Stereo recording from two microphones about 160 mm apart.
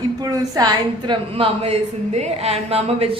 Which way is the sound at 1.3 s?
40° right (ahead or behind).